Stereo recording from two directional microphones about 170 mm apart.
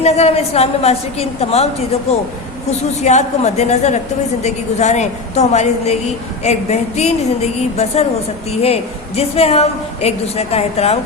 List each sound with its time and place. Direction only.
0.0 s a woman's voice: 40° left (ahead or behind)